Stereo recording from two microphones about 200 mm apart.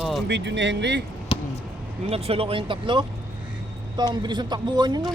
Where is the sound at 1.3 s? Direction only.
25° left (ahead or behind).